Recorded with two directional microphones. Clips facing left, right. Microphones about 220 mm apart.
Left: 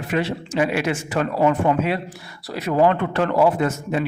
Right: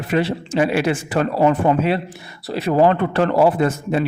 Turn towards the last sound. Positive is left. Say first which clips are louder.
# right 3 dB
turn(degrees=-35)  # may be behind; listen again after turning